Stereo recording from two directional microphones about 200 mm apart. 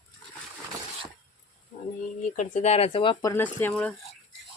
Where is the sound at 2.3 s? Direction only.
40° left (ahead or behind); by 3.9 s 5° left (ahead or behind).